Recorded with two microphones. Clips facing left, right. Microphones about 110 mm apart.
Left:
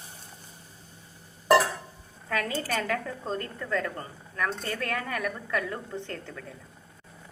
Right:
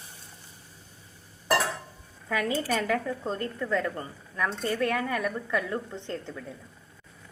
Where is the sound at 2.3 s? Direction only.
15° right (ahead or behind).